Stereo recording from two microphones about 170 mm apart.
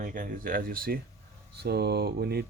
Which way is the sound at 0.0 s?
55° right (ahead or behind).